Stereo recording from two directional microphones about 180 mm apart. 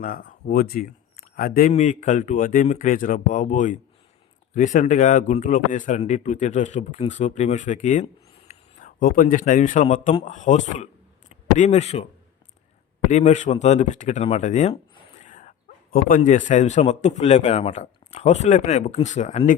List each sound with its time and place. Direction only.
0.0 s speech: 50° left (ahead or behind)
1.7 s a man's voice: 40° left (ahead or behind)
13.1 s a man's voice: 40° left (ahead or behind)